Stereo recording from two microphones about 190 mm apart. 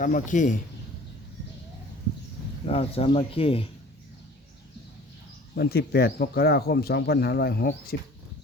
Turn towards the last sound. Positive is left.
turn(degrees=55)  # may be behind; listen again after turning